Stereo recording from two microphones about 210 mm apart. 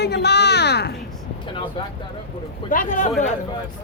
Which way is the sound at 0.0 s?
50° left (ahead or behind).